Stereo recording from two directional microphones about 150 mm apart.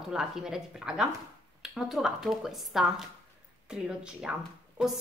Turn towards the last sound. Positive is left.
turn(degrees=-5)  # may be behind; listen again after turning